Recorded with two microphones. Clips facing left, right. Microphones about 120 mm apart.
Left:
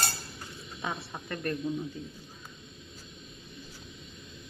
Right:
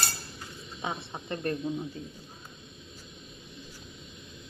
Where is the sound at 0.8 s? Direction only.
20° right (ahead or behind).